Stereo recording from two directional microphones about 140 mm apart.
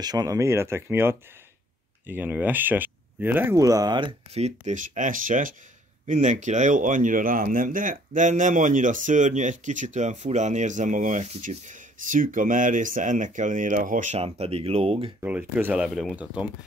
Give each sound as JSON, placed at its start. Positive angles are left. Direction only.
{"t": 0.0, "sound": "speech", "side_deg": -25}
{"t": 4.3, "sound": "speech", "side_deg": -50}
{"t": 14.2, "sound": "speech", "side_deg": -45}
{"t": 15.1, "sound": "speech", "side_deg": -10}